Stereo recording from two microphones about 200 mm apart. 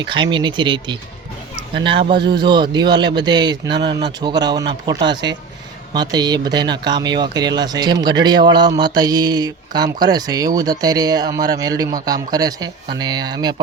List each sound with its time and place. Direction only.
0.1 s speech: 25° right (ahead or behind)